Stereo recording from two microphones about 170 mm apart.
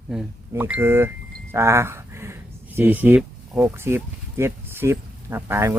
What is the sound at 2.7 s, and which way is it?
Speech, 10° right (ahead or behind).